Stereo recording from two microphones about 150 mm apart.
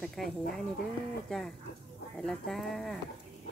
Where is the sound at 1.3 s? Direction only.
5° left (ahead or behind).